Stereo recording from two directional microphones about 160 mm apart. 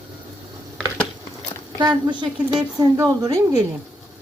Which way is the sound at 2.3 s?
5° right (ahead or behind).